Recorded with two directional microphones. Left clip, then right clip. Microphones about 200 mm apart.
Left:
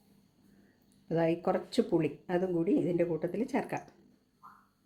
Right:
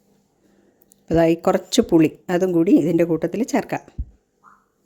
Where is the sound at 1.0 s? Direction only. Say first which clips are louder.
Right 13 dB; 60° right (ahead or behind).